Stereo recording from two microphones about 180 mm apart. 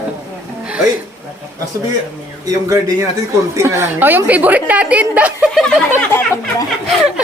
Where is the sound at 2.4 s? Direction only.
20° right (ahead or behind).